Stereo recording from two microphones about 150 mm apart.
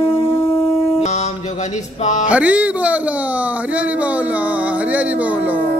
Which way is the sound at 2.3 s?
10° right (ahead or behind).